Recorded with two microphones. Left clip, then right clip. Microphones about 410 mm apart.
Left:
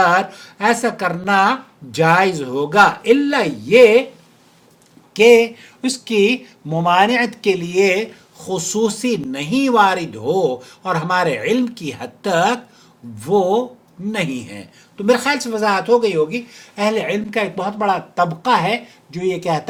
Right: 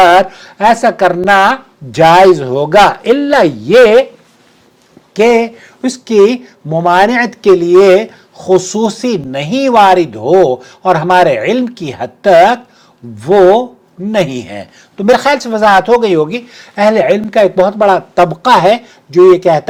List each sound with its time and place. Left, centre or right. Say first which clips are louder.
0.3 s speech: right 8 dB; right
5.1 s speech: right 2 dB; centre